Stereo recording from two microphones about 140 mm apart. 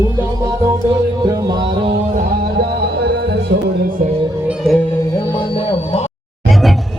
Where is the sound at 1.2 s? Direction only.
30° right (ahead or behind).